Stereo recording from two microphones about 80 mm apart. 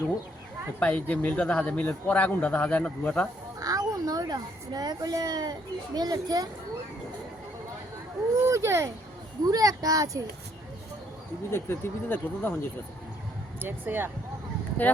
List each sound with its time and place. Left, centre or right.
0.8 s a man's voice: centre
3.6 s speech: right
8.4 s speech: right
9.4 s speech: right
11.5 s speech: left
13.6 s speech: right